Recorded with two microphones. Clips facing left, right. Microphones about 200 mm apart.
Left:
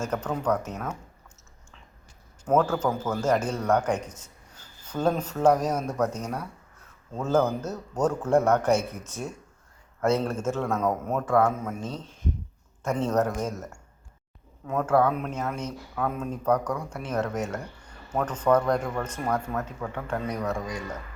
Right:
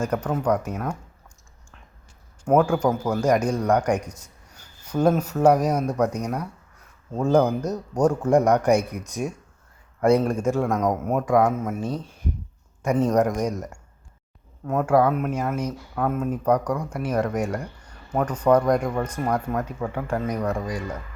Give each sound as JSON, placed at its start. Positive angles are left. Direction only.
{"t": 0.3, "sound": "a man's voice", "side_deg": -10}
{"t": 2.4, "sound": "a man's voice", "side_deg": -10}
{"t": 14.7, "sound": "a man's voice", "side_deg": -10}